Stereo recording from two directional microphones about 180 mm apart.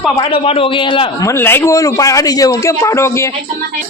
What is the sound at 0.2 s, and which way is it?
A man's voice, 30° left (ahead or behind).